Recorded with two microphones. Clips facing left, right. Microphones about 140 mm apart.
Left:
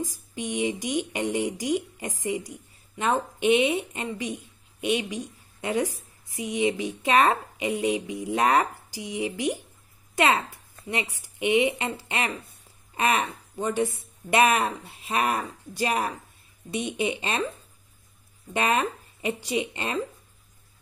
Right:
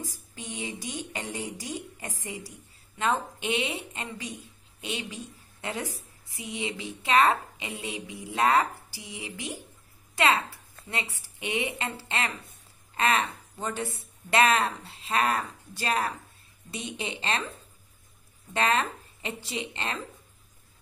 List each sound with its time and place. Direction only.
0.0 s a woman's voice: 15° left (ahead or behind)
18.5 s a woman's voice: 15° left (ahead or behind)